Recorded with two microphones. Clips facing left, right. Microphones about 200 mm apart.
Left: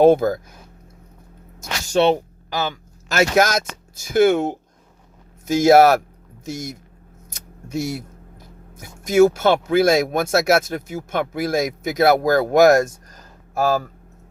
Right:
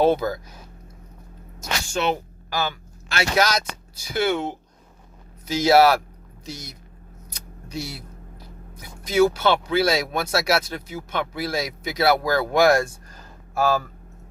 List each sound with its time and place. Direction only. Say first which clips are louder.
0.0 s speech: left 6 dB; 50° left (ahead or behind)
1.9 s speech: left 8 dB; 30° left (ahead or behind)
2.5 s speech: left 2 dB; 20° left (ahead or behind)
3.1 s speech: left 5 dB; 45° left (ahead or behind)